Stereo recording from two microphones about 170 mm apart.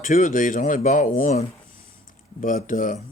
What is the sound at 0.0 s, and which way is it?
Speech, 50° left (ahead or behind).